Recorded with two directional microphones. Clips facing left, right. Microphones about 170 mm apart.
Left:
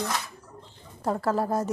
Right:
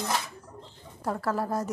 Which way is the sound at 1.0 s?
25° left (ahead or behind).